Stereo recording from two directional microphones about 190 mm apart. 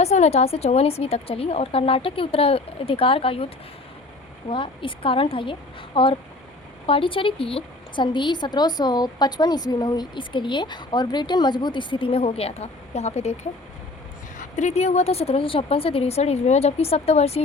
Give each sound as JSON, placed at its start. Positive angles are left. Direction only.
{"t": 0.0, "sound": "a woman's voice", "side_deg": 35}
{"t": 14.5, "sound": "a woman's voice", "side_deg": 35}